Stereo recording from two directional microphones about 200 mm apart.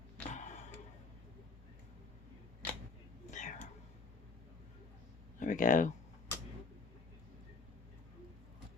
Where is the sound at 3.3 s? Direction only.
40° left (ahead or behind).